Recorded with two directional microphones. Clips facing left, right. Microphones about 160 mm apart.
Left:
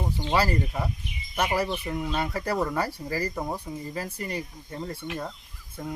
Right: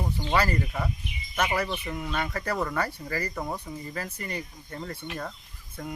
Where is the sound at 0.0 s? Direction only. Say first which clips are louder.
Left 1 dB; 15° left (ahead or behind).